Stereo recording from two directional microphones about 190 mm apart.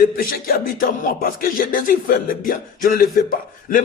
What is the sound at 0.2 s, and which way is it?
Speech, 50° left (ahead or behind).